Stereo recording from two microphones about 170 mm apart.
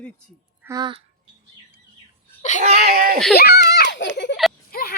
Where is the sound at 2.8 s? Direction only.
55° right (ahead or behind).